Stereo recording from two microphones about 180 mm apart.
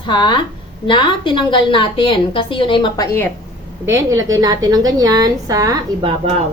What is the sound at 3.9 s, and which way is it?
A woman's voice, 15° right (ahead or behind).